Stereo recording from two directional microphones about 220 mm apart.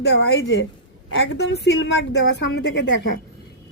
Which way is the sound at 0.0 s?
50° left (ahead or behind).